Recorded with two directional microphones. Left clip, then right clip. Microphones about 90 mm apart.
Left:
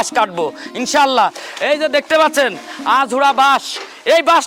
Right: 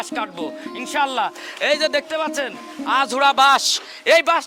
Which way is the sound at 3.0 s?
5° right (ahead or behind).